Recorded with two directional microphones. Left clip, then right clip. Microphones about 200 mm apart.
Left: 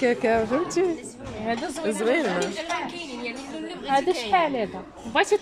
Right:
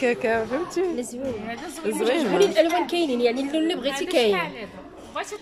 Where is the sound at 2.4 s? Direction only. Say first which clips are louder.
Right 9 dB; 50° right (ahead or behind).